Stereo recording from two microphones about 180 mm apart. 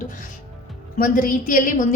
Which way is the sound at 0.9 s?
50° left (ahead or behind).